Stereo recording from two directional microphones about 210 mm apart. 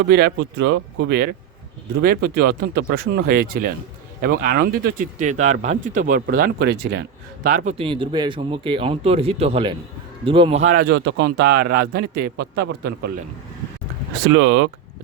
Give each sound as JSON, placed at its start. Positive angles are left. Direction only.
{"t": 0.0, "sound": "a man's voice", "side_deg": -55}
{"t": 7.4, "sound": "speech", "side_deg": -35}
{"t": 10.8, "sound": "a man's voice", "side_deg": -55}
{"t": 14.3, "sound": "speech", "side_deg": -65}